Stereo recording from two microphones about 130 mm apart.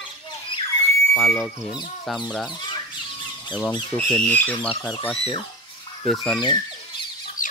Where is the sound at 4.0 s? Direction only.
10° left (ahead or behind).